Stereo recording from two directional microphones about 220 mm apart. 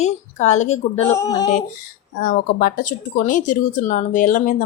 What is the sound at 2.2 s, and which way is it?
Speech, 40° left (ahead or behind).